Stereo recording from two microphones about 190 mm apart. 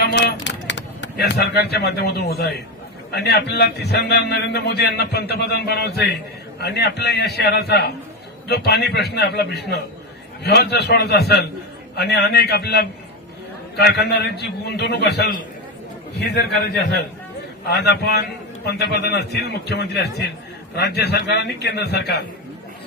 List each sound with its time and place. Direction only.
0.0 s a man's voice: 60° left (ahead or behind)
16.4 s a man's voice: 60° left (ahead or behind)